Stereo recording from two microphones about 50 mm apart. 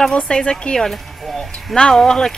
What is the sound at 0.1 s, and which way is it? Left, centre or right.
Speech, centre.